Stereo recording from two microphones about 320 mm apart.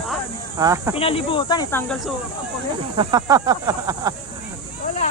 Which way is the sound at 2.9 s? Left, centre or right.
Centre.